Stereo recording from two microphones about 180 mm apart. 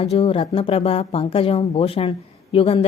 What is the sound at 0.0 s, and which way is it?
Speech, 30° left (ahead or behind).